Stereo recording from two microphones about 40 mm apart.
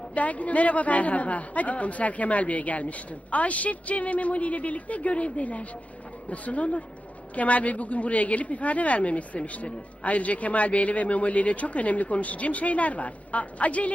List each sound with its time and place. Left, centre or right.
0.1 s speech: left